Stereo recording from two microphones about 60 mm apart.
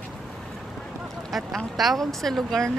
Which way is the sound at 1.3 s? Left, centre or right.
Centre.